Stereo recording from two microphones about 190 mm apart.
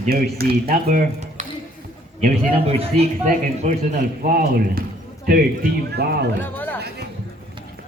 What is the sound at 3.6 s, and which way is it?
Speech, 45° right (ahead or behind).